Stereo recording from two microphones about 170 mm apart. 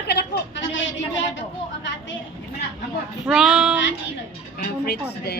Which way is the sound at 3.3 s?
Centre (ahead or behind).